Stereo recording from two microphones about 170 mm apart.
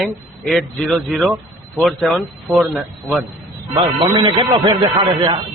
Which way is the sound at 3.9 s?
30° right (ahead or behind).